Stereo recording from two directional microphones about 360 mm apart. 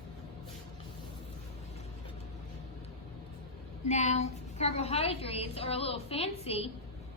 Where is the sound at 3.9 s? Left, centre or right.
Centre.